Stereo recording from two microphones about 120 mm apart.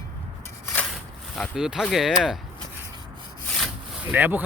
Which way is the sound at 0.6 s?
15° left (ahead or behind).